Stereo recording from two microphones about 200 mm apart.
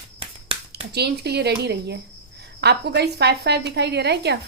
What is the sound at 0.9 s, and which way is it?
A woman's voice, 55° right (ahead or behind).